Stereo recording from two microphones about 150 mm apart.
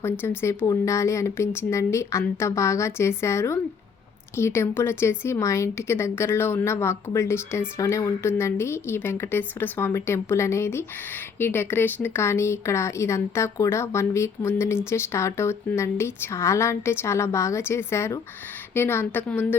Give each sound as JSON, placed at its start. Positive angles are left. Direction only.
{"t": 0.0, "sound": "a woman's voice", "side_deg": 15}